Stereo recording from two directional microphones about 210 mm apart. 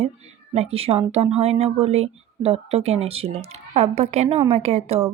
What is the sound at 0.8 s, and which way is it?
Speech, 30° right (ahead or behind).